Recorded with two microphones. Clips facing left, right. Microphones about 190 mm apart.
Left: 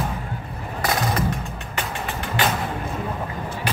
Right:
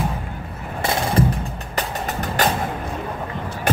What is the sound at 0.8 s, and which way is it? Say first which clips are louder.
Music: right 3 dB; 30° right (ahead or behind).